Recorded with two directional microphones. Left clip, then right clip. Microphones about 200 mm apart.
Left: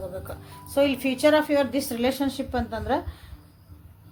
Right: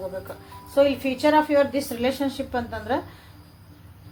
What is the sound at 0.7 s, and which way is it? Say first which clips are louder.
A woman's voice: right 3 dB; 60° left (ahead or behind).